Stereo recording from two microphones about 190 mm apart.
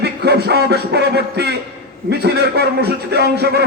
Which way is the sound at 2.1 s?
60° right (ahead or behind).